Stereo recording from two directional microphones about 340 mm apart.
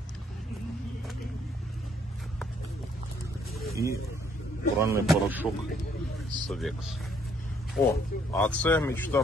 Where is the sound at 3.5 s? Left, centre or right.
Centre.